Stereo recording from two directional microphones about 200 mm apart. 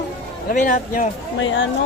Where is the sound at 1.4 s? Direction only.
70° left (ahead or behind).